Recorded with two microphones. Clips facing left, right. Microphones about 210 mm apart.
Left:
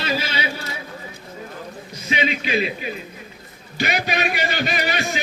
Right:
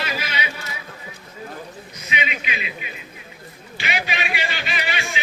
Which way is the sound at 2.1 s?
35° left (ahead or behind).